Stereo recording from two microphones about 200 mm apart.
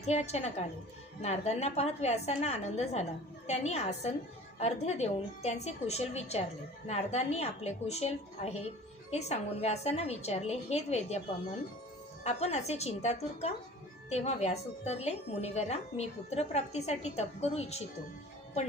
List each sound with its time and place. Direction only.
0.0 s a woman's voice: 35° left (ahead or behind)
12.2 s a woman's voice: 35° left (ahead or behind)